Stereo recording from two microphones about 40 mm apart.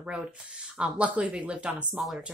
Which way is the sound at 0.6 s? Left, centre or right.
Centre.